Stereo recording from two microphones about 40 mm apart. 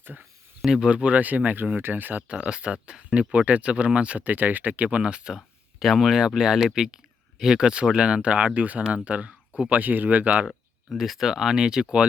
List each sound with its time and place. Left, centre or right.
0.0 s speech: right
0.6 s speech: centre
0.9 s speech: right
2.4 s speech: right
3.2 s speech: right
4.3 s speech: right
5.8 s speech: centre; by 10.4 s right
10.9 s speech: centre; by 12.0 s right